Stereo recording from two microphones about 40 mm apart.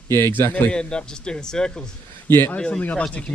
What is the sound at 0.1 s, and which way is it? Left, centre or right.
Speech, left.